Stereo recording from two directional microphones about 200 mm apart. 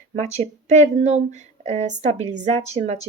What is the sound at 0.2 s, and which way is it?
Speech, 35° right (ahead or behind).